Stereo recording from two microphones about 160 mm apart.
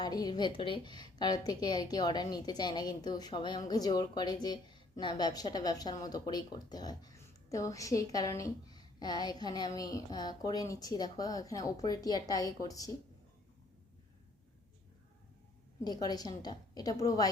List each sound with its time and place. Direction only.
0.0 s a woman's voice: 25° left (ahead or behind)
15.8 s a woman's voice: 25° left (ahead or behind)